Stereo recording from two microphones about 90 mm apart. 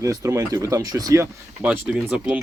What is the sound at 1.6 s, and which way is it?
Speech, 10° right (ahead or behind).